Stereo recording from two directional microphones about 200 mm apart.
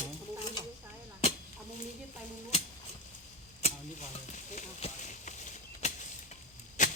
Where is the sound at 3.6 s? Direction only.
30° left (ahead or behind).